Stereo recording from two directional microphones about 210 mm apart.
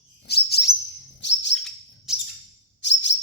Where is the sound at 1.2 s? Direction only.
55° left (ahead or behind).